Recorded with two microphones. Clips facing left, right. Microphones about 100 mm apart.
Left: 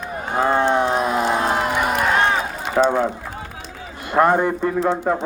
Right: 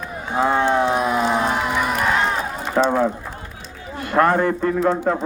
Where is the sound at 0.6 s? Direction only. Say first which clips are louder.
Even; 5° right (ahead or behind).